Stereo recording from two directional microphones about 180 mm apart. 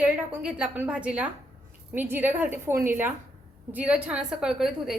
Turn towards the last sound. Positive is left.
turn(degrees=-5)  # may be behind; listen again after turning